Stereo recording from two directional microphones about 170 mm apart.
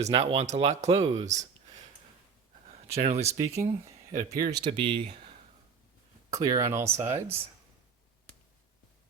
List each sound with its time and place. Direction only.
0.0 s speech: 35° right (ahead or behind)
2.9 s speech: 35° right (ahead or behind)
6.3 s speech: 20° right (ahead or behind)